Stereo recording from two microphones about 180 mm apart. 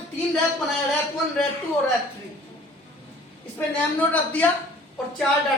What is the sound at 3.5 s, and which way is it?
Speech, 10° left (ahead or behind).